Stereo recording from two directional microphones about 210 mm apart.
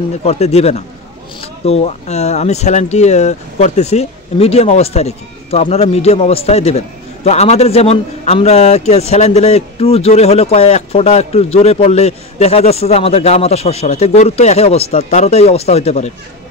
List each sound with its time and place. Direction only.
0.2 s a man's voice: 30° left (ahead or behind)